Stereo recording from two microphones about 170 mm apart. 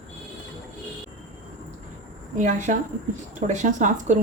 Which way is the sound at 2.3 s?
45° right (ahead or behind).